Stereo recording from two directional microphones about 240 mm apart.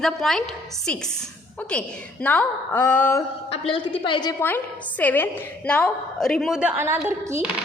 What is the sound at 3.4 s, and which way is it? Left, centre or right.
Speech, left.